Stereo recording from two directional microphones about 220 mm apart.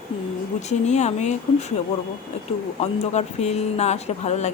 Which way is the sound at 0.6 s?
30° left (ahead or behind).